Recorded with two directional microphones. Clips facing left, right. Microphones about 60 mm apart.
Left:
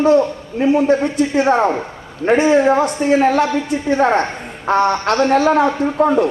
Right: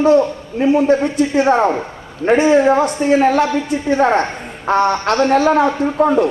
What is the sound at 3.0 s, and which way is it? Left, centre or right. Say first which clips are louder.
A man's voice: right 1 dB; centre.